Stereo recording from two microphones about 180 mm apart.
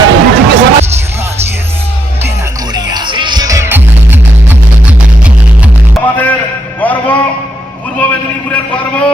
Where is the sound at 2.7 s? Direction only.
25° right (ahead or behind); by 6.0 s 5° right (ahead or behind).